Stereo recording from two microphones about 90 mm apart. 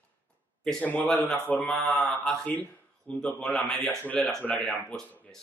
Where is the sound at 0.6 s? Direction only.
10° left (ahead or behind).